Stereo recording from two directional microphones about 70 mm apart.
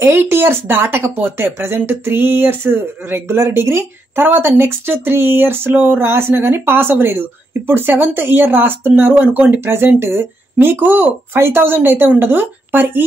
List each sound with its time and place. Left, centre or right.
0.0 s a woman's voice: right